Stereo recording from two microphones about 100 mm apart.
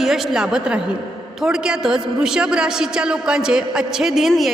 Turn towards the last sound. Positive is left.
turn(degrees=0)  # may be behind; listen again after turning